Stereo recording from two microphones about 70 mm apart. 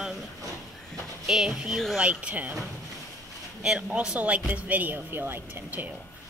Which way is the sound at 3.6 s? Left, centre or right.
Centre.